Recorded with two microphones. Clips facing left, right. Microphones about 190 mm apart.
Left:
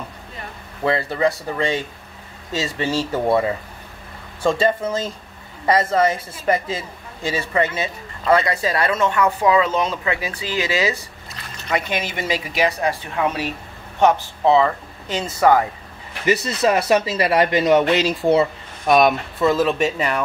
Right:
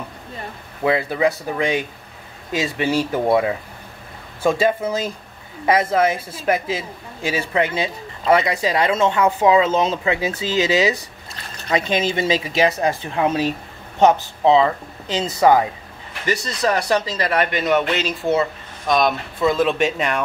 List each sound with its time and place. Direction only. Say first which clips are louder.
0.8 s a woman's voice: right 1 dB; 10° right (ahead or behind); by 13.5 s 25° right (ahead or behind)
14.4 s a woman's voice: right 1 dB; 15° right (ahead or behind)
16.3 s speech: left 3 dB; 25° left (ahead or behind)
16.7 s speech: left 2 dB; 5° left (ahead or behind)